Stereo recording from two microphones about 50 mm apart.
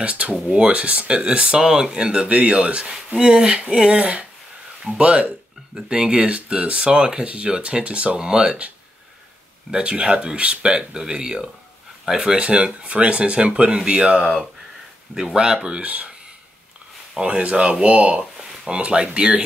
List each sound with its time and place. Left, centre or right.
0.0 s speech: right
9.7 s speech: right
17.2 s speech: right
18.4 s a sound: centre
18.7 s speech: centre